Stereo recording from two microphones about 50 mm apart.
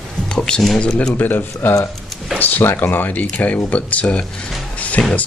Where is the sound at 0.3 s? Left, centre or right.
Centre.